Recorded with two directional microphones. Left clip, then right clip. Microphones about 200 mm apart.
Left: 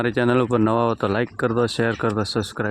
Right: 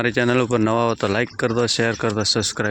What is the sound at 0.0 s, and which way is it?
Speech, centre (ahead or behind).